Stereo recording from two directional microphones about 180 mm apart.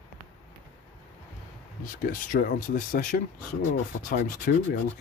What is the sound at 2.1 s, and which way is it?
Speech, 50° left (ahead or behind).